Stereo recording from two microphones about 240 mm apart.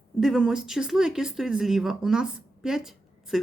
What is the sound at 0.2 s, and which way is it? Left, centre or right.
Speech, centre.